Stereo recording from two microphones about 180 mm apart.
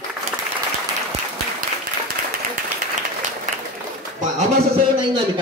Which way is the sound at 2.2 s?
45° right (ahead or behind).